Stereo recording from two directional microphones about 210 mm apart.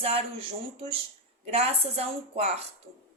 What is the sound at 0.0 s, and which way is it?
A woman's voice, 30° right (ahead or behind).